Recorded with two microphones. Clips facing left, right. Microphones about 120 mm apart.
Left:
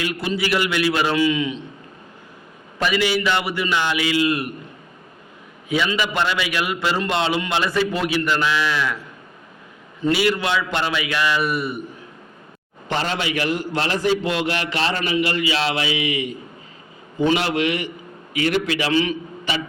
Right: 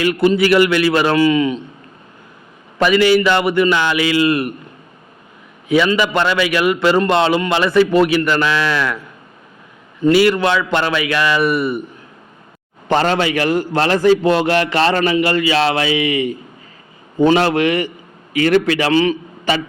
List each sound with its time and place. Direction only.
0.0 s a man's voice: 60° right (ahead or behind)
2.7 s a man's voice: 60° right (ahead or behind)
5.6 s a man's voice: 60° right (ahead or behind)
10.1 s a man's voice: 60° right (ahead or behind)
12.9 s a man's voice: 55° right (ahead or behind)